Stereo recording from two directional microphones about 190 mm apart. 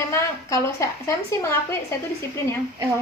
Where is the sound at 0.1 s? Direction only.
15° left (ahead or behind).